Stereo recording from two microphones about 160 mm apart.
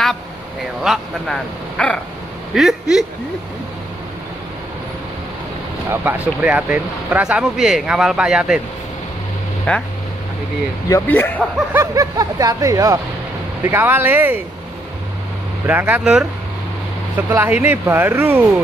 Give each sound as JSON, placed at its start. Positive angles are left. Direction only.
{"t": 0.8, "sound": "speech", "side_deg": 0}
{"t": 5.9, "sound": "speech", "side_deg": -10}
{"t": 10.9, "sound": "speech", "side_deg": 10}
{"t": 11.7, "sound": "speech", "side_deg": -20}
{"t": 15.6, "sound": "speech", "side_deg": -10}
{"t": 17.3, "sound": "speech", "side_deg": -10}